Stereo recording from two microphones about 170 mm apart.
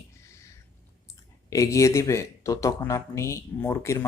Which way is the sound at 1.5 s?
20° left (ahead or behind).